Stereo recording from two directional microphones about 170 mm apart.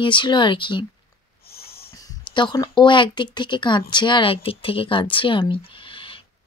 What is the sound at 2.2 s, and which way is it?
Speech, 25° left (ahead or behind).